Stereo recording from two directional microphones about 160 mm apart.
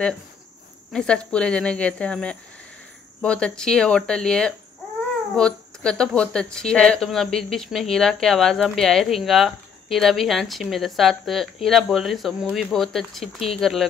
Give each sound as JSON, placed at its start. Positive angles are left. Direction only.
{"t": 0.9, "sound": "speech", "side_deg": 5}